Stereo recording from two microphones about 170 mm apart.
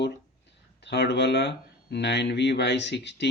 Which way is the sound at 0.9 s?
85° left.